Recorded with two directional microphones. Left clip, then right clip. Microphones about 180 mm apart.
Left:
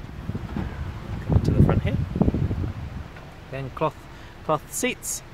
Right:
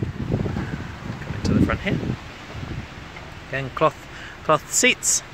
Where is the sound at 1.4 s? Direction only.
5° left (ahead or behind).